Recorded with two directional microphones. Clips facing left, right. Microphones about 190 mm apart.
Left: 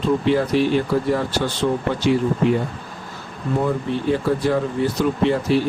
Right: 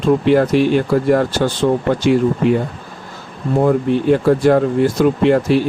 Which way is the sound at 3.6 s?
55° right (ahead or behind).